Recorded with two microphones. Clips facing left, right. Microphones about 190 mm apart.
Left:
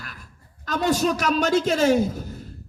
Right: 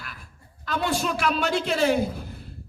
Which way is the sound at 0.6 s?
45° left (ahead or behind).